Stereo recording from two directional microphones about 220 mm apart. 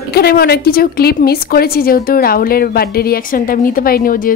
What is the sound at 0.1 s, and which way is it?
A woman's voice, 45° left (ahead or behind).